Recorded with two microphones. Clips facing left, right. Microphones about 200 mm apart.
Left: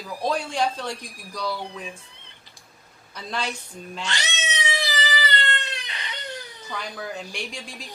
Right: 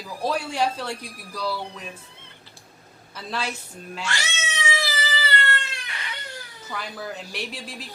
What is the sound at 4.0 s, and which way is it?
Cat, 20° left (ahead or behind).